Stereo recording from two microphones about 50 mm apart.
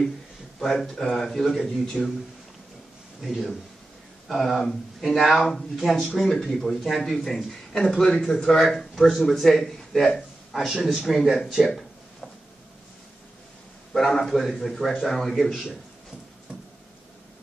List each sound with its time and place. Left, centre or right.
0.6 s speech: centre
3.2 s a man's voice: centre
13.9 s a man's voice: centre